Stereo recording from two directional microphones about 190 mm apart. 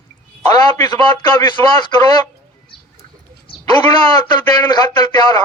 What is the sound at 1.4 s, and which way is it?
Speech, 20° left (ahead or behind).